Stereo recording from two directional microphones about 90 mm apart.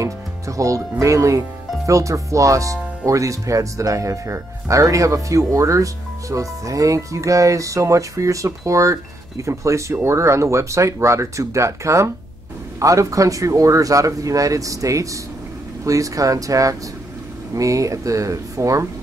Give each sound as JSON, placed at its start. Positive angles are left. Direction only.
{"t": 0.0, "sound": "speech", "side_deg": -40}